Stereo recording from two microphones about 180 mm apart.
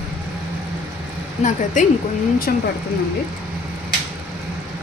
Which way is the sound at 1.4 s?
45° left (ahead or behind).